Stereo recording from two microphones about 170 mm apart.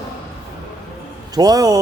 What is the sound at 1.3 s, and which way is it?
Speech, 20° right (ahead or behind).